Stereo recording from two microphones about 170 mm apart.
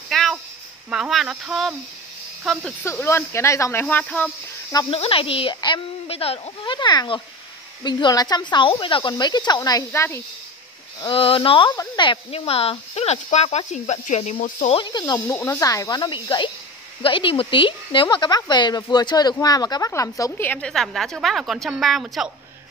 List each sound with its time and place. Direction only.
0.1 s a sound: centre (ahead or behind)
0.8 s speech: 5° right (ahead or behind)
2.8 s speech: 15° left (ahead or behind)
4.7 s speech: 35° left (ahead or behind); by 10.2 s 15° left (ahead or behind)
11.0 s speech: 30° left (ahead or behind)
11.7 s speech: 20° left (ahead or behind); by 14.8 s 45° left (ahead or behind)
14.8 s speech: 25° left (ahead or behind); by 22.3 s centre (ahead or behind)